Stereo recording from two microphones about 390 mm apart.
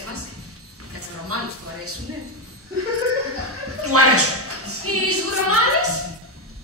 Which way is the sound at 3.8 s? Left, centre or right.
Right.